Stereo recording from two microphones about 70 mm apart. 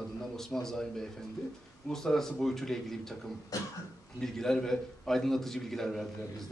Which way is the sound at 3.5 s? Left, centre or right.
Left.